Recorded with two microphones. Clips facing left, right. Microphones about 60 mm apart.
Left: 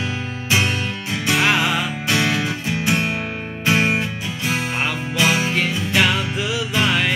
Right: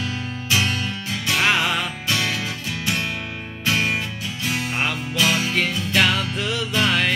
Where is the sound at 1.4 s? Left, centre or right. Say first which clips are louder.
Left 1 dB; centre.